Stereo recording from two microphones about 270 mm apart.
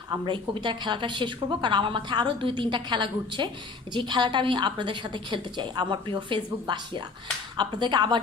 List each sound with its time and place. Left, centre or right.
0.1 s a woman's voice: centre